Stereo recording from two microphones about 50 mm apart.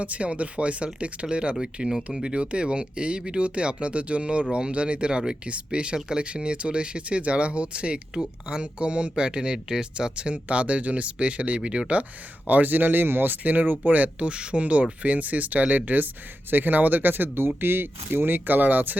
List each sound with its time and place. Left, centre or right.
0.0 s speech: right
12.5 s speech: right